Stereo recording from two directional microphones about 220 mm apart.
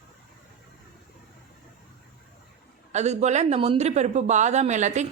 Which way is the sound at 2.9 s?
30° right (ahead or behind).